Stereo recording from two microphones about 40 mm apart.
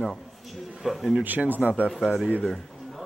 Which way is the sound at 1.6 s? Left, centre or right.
Right.